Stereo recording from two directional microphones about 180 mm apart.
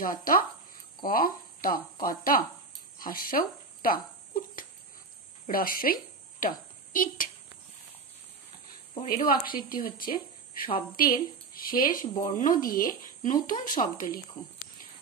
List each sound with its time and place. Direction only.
0.0 s speech: 50° left (ahead or behind)
3.0 s a sound: 50° left (ahead or behind)
5.5 s a woman's voice: 50° left (ahead or behind)
9.1 s speech: 55° left (ahead or behind)